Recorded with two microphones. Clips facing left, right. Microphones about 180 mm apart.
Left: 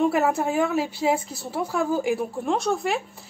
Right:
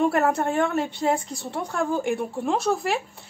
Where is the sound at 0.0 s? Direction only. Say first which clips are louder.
Even; centre (ahead or behind).